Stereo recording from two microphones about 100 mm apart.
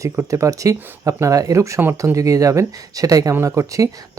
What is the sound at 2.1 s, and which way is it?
Speech, 35° right (ahead or behind).